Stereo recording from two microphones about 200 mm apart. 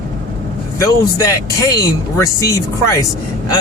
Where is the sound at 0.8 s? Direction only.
15° left (ahead or behind).